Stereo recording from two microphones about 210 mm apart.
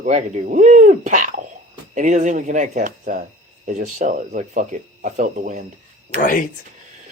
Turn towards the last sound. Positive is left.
turn(degrees=40)  # may be behind; listen again after turning